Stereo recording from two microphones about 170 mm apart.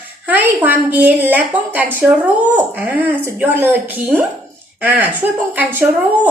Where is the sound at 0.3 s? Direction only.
10° right (ahead or behind).